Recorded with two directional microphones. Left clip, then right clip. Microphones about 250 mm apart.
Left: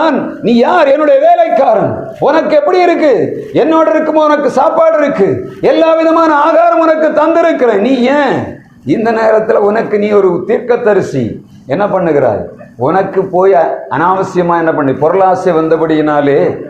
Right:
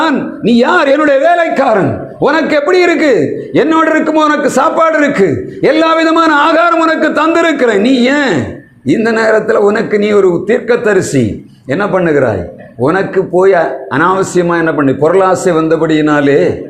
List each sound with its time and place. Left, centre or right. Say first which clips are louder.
0.0 s a man's voice: left 1 dB; right